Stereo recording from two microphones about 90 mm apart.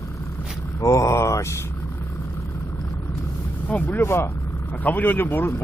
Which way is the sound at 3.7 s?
15° left (ahead or behind).